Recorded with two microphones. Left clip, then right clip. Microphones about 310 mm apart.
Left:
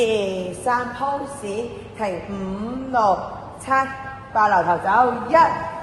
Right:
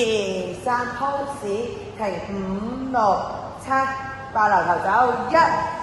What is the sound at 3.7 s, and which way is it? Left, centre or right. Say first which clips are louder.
A man's voice: left 1 dB; left.